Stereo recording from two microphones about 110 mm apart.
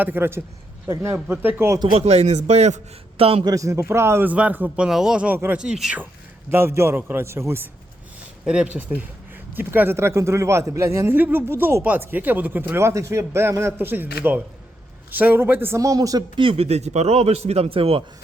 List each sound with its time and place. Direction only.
0.0 s speech: 20° right (ahead or behind)
1.9 s speech: 70° right (ahead or behind)
3.4 s speech: 30° right (ahead or behind); by 6.0 s 5° right (ahead or behind)
6.5 s speech: 20° right (ahead or behind)
8.4 s speech: 10° right (ahead or behind); by 16.4 s 35° right (ahead or behind)
16.4 s speech: 60° right (ahead or behind)